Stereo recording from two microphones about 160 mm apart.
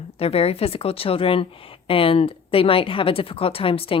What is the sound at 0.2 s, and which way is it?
A woman's voice, 40° left (ahead or behind).